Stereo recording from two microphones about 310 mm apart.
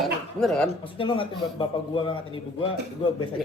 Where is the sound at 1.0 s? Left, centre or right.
Centre.